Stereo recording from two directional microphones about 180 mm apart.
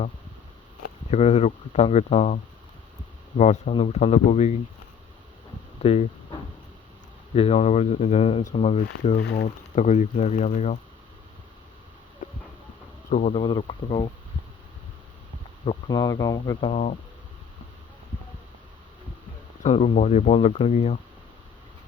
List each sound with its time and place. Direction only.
1.1 s speech: 40° left (ahead or behind)
5.8 s speech: 35° left (ahead or behind)
7.3 s speech: 35° left (ahead or behind)
9.2 s speech: 65° left (ahead or behind)
9.7 s speech: 40° left (ahead or behind)
13.1 s speech: 45° left (ahead or behind)
13.3 s speech: 25° left (ahead or behind)
15.9 s speech: 20° left (ahead or behind)
19.6 s speech: 35° left (ahead or behind)